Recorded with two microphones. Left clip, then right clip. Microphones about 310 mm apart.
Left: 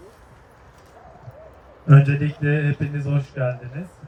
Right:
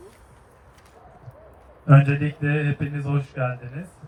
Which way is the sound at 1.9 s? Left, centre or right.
Centre.